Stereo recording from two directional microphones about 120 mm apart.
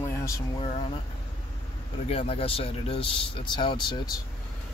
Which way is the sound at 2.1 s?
55° left (ahead or behind).